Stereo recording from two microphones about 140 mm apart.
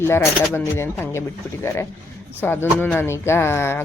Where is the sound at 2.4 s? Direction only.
15° left (ahead or behind).